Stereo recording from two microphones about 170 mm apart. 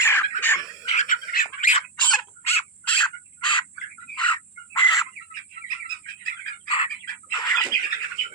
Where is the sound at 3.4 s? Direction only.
25° left (ahead or behind).